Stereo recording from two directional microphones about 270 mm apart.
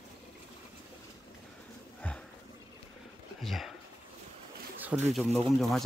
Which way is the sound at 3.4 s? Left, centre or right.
Centre.